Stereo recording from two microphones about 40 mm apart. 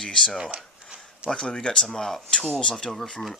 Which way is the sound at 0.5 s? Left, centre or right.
Centre.